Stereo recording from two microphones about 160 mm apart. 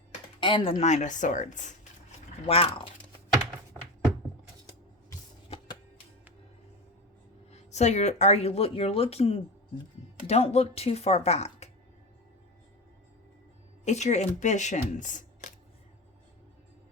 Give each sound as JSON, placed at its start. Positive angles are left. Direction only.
{"t": 0.3, "sound": "speech", "side_deg": 30}
{"t": 2.5, "sound": "speech", "side_deg": 35}
{"t": 7.5, "sound": "speech", "side_deg": 45}
{"t": 13.8, "sound": "speech", "side_deg": 45}